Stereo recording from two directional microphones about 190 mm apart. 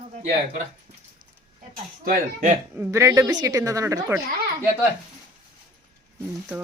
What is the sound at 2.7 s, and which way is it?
A woman's voice, 10° right (ahead or behind).